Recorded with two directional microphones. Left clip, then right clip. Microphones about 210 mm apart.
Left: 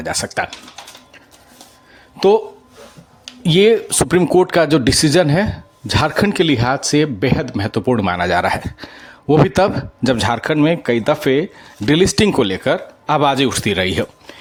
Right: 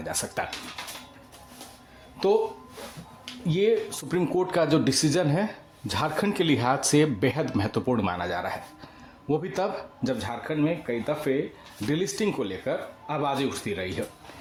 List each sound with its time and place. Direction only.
0.0 s speech: 30° left (ahead or behind)
3.4 s speech: 40° left (ahead or behind)